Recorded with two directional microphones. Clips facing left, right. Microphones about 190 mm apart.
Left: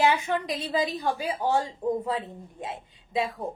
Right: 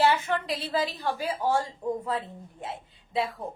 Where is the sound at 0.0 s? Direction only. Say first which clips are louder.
Even; 15° left (ahead or behind).